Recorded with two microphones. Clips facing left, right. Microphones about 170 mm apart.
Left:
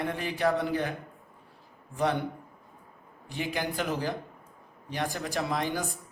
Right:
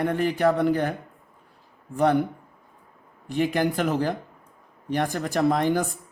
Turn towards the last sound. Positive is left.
turn(degrees=-50)  # may be behind; listen again after turning